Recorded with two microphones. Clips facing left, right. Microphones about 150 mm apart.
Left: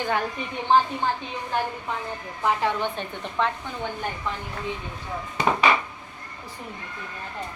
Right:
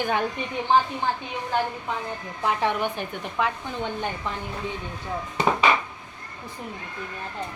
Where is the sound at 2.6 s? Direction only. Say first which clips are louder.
Right 1 dB; 15° right (ahead or behind).